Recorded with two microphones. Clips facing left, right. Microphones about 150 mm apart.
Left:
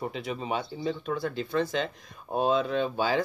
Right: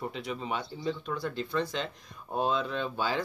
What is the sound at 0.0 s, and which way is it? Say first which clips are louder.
Speech: left 2 dB; 15° left (ahead or behind).